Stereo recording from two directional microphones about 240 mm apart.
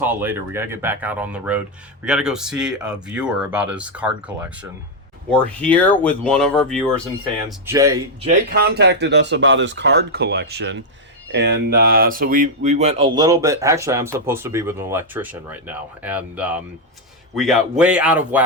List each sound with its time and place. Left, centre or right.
0.0 s speech: centre
7.7 s speech: centre
8.3 s speech: right; by 18.4 s centre